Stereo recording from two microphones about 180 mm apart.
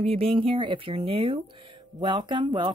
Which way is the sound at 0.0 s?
30° right (ahead or behind).